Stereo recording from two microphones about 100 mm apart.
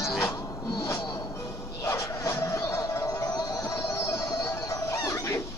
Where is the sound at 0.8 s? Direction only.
30° left (ahead or behind).